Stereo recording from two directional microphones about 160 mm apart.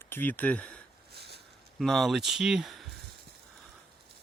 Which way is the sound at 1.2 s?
90° right.